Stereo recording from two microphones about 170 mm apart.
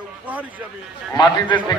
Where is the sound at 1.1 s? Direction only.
25° left (ahead or behind).